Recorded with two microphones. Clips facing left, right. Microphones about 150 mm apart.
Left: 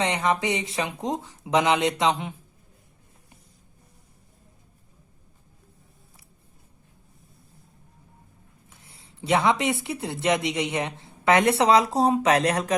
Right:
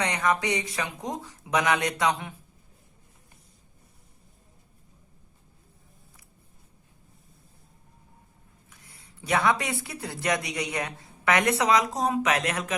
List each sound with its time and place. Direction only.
0.0 s speech: 25° left (ahead or behind)
8.7 s a sound: 25° left (ahead or behind)
9.8 s speech: 25° left (ahead or behind)